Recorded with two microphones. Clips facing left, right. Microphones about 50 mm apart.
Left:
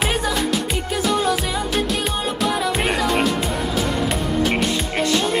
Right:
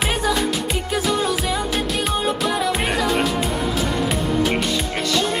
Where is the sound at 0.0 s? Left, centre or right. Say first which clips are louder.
Right 1 dB; centre.